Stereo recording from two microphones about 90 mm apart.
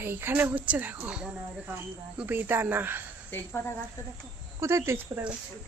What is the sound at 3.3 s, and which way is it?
Speech, 25° left (ahead or behind).